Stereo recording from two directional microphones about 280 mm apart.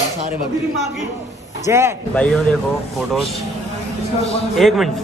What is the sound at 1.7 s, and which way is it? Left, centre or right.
Speech, centre.